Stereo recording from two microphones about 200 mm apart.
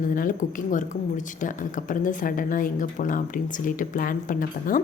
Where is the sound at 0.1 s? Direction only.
45° left (ahead or behind).